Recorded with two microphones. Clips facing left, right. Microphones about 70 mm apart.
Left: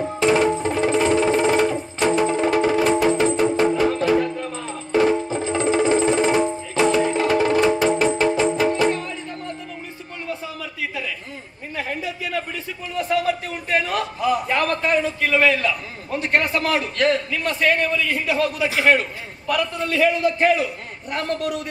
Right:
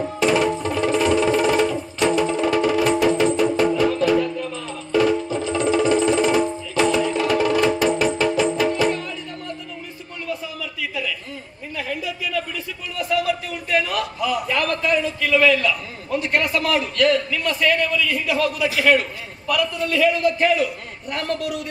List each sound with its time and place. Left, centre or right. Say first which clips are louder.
0.2 s music: left 1 dB; left
10.2 s a sound: right 1 dB; left
16.1 s a man's voice: even; left